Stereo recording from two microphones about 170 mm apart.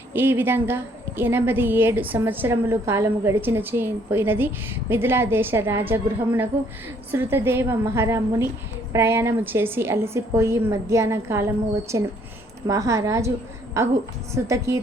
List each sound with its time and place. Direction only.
0.1 s a woman's voice: 15° right (ahead or behind)